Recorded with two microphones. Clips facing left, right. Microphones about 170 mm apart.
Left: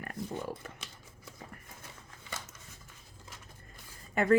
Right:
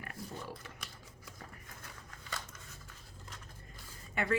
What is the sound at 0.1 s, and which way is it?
Pig, 45° left (ahead or behind).